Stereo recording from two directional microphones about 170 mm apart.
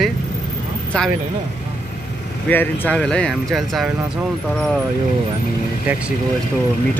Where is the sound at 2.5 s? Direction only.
10° left (ahead or behind).